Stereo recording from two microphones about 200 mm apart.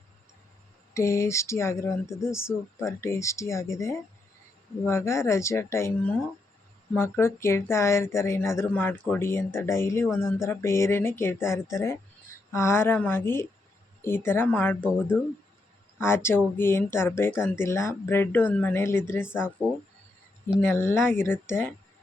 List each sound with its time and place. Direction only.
0.9 s speech: 15° left (ahead or behind)
20.6 s speech: 10° left (ahead or behind)